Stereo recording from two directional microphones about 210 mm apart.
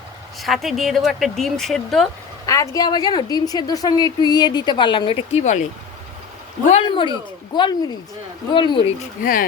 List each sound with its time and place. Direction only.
0.4 s speech: centre (ahead or behind)
2.5 s a woman's voice: 15° left (ahead or behind); by 5.6 s 35° left (ahead or behind)
6.7 s a woman's voice: 25° left (ahead or behind)
9.2 s speech: 40° left (ahead or behind)